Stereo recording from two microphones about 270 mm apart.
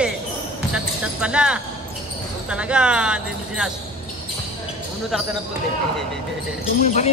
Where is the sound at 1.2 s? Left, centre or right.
Centre.